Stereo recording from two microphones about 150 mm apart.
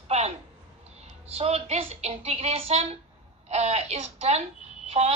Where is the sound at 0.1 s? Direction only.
45° right (ahead or behind).